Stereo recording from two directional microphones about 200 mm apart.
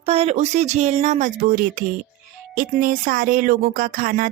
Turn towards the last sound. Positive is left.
turn(degrees=-45)  # may be behind; listen again after turning